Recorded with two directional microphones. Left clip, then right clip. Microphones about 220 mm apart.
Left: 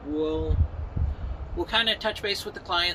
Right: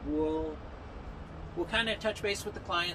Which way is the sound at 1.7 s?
15° right (ahead or behind).